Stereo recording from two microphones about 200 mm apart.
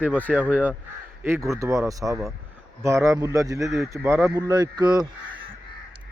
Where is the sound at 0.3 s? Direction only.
5° right (ahead or behind).